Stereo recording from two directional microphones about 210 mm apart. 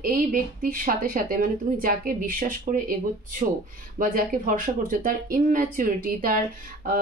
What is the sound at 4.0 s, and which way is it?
Speech, 40° right (ahead or behind).